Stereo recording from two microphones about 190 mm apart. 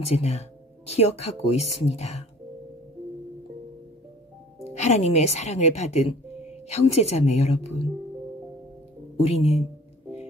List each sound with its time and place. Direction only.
0.0 s speech: 35° left (ahead or behind)
4.6 s speech: 35° left (ahead or behind)
9.1 s speech: 35° left (ahead or behind)